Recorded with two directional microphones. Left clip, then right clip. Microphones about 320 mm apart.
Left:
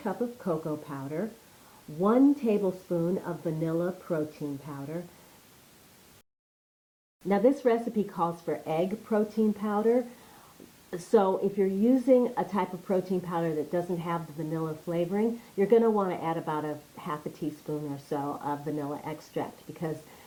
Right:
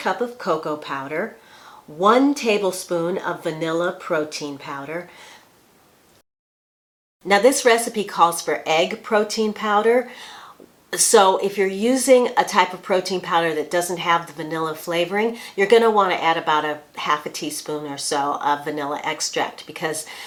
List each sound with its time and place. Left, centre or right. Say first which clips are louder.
0.0 s speech: right 10 dB; centre
7.3 s a woman's voice: right 9 dB; centre